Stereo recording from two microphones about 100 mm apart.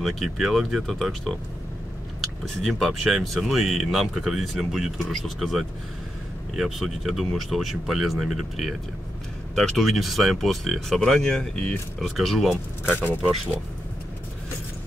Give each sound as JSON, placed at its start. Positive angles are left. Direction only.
{"t": 0.0, "sound": "speech", "side_deg": 0}
{"t": 2.6, "sound": "speech", "side_deg": 0}
{"t": 12.9, "sound": "speech", "side_deg": 15}